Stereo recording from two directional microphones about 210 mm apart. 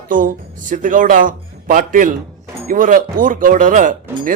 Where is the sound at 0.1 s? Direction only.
40° right (ahead or behind).